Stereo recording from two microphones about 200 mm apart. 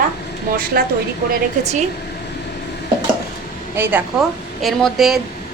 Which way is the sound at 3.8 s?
10° right (ahead or behind).